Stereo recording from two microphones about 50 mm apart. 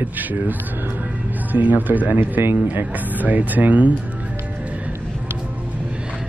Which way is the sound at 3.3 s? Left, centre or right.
Right.